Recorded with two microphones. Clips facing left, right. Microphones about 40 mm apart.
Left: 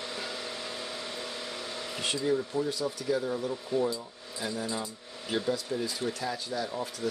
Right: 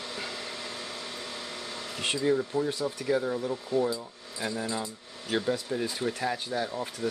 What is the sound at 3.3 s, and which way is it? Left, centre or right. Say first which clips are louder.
Speech: right 2 dB; centre.